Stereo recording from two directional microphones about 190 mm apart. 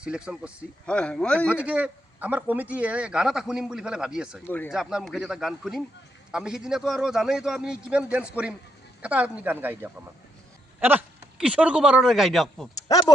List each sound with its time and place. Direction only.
0.0 s a man's voice: 5° right (ahead or behind)
0.9 s a man's voice: 5° left (ahead or behind)
1.5 s a man's voice: 5° right (ahead or behind)
4.4 s speech: 10° left (ahead or behind)
4.7 s a man's voice: 5° right (ahead or behind)
12.9 s speech: 20° left (ahead or behind)